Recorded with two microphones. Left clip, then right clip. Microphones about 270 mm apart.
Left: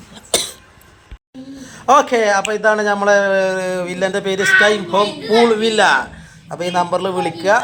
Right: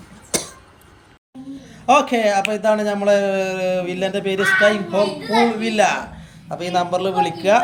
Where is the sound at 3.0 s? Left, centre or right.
Centre.